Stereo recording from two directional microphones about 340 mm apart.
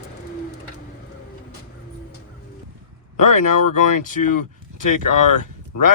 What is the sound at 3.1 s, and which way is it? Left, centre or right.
Speech, left.